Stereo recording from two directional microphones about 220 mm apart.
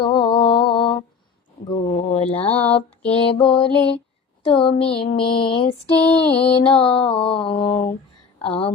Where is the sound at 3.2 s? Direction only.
25° left (ahead or behind).